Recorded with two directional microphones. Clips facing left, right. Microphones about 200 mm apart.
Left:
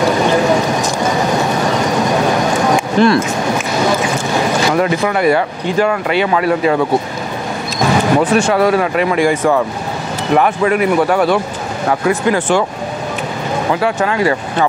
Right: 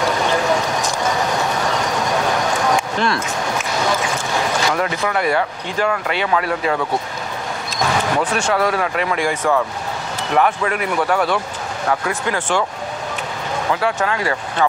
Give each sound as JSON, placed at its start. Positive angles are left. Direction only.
{"t": 0.0, "sound": "a sound", "side_deg": 10}
{"t": 2.7, "sound": "speech", "side_deg": 10}
{"t": 7.8, "sound": "basketball bounce", "side_deg": 10}
{"t": 8.3, "sound": "speech", "side_deg": 5}
{"t": 13.7, "sound": "speech", "side_deg": 15}